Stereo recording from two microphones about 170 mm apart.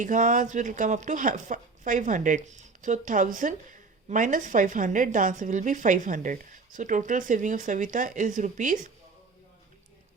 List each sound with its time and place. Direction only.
0.0 s speech: 50° right (ahead or behind)